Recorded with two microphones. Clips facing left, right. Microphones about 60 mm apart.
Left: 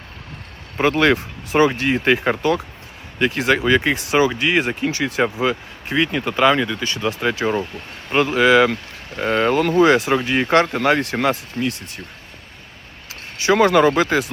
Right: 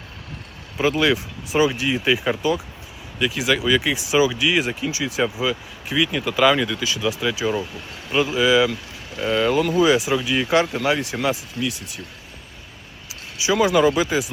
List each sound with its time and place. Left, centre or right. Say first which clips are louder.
0.8 s speech: left 3 dB; left
6.1 s speech: left 2 dB; left
6.3 s speech: left 1 dB; centre
7.0 s speech: left 3 dB; left
13.4 s speech: left 3 dB; left